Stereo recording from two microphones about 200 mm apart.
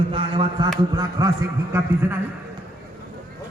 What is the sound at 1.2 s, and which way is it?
A man's voice, 15° right (ahead or behind).